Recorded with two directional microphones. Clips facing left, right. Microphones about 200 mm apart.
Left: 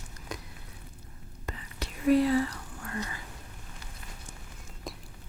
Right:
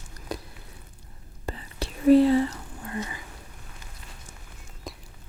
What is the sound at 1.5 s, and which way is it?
Whispering, 30° right (ahead or behind).